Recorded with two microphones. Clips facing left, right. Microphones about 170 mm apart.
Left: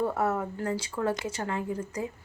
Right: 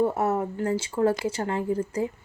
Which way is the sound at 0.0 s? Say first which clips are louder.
Right 4 dB; 25° right (ahead or behind).